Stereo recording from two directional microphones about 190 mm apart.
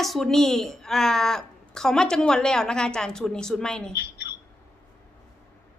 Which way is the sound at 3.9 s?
55° left (ahead or behind).